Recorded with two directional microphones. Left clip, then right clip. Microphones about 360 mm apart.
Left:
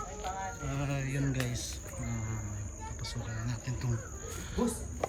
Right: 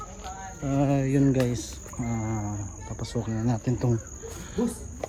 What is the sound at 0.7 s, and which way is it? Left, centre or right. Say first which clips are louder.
Speech: right 12 dB; centre.